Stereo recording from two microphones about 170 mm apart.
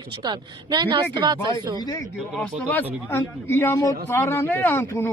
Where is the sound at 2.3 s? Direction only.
10° left (ahead or behind).